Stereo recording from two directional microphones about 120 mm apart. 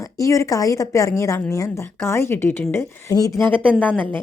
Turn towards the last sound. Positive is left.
turn(degrees=15)  # may be behind; listen again after turning